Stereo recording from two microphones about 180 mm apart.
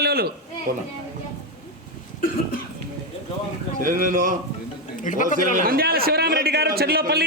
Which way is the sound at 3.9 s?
50° right (ahead or behind).